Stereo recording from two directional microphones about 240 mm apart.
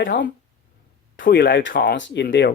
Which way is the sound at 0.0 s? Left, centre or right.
Left.